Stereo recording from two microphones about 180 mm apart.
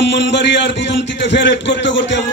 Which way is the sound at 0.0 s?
80° left.